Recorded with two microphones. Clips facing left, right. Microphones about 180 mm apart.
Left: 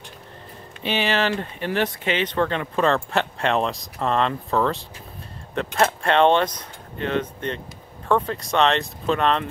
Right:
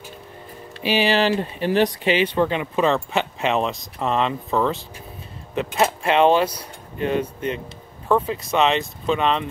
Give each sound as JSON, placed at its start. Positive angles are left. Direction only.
{"t": 0.8, "sound": "speech", "side_deg": -10}
{"t": 2.0, "sound": "speech", "side_deg": -10}